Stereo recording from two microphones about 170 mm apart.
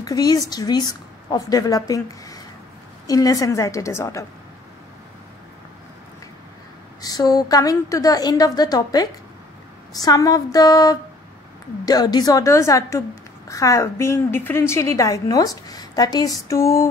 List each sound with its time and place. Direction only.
0.0 s a woman's voice: 20° left (ahead or behind)
7.0 s a woman's voice: 20° left (ahead or behind)